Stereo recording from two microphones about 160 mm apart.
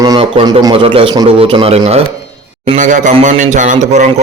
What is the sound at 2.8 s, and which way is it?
A man's voice, 50° right (ahead or behind).